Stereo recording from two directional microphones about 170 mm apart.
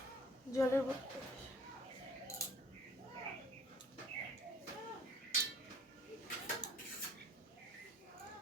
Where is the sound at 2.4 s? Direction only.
20° left (ahead or behind).